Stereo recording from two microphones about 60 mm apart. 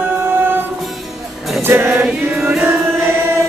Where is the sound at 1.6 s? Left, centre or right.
Right.